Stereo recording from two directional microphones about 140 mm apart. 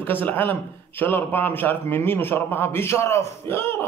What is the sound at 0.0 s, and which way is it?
A man's voice, 15° left (ahead or behind).